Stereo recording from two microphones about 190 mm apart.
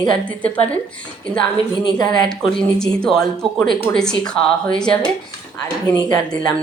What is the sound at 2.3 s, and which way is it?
Speech, 5° left (ahead or behind).